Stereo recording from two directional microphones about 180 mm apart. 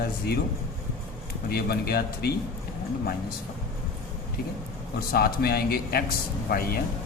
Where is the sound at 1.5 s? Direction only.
60° left (ahead or behind).